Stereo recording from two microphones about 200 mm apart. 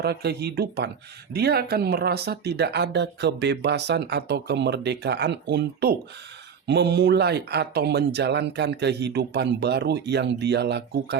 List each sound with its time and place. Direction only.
0.0 s speech: 55° right (ahead or behind)